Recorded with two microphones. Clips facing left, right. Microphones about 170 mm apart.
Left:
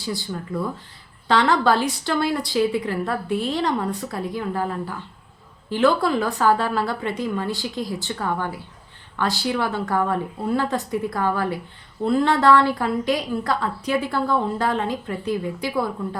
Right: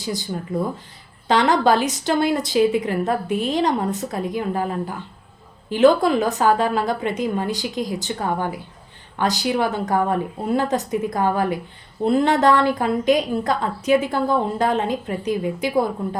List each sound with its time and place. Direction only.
0.0 s a woman's voice: 20° right (ahead or behind)